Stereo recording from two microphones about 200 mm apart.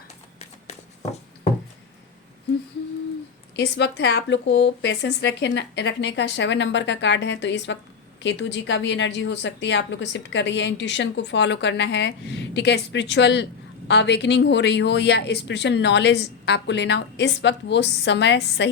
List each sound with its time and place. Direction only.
3.5 s a woman's voice: 60° left (ahead or behind)